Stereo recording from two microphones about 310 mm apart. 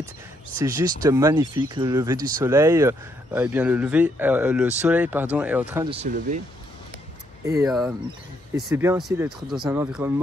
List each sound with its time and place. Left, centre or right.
0.7 s speech: centre
5.9 s speech: right
7.4 s speech: centre